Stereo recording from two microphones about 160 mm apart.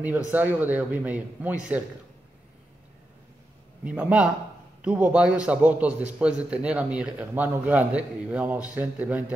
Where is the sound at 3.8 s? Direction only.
5° right (ahead or behind).